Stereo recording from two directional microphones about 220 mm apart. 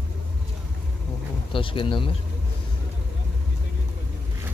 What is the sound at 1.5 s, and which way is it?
Speech, 25° left (ahead or behind).